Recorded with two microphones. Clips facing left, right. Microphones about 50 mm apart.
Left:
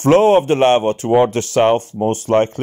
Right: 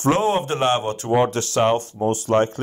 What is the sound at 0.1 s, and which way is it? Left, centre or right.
Speech, left.